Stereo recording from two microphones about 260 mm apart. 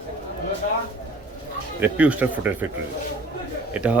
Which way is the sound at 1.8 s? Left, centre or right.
Centre.